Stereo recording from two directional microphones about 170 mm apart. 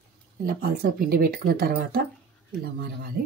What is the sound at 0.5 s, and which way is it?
Speech, 60° right (ahead or behind).